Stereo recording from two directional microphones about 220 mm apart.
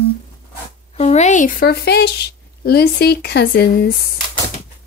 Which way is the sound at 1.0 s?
30° left (ahead or behind).